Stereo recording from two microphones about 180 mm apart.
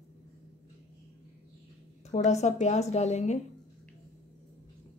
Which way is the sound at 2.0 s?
40° left (ahead or behind).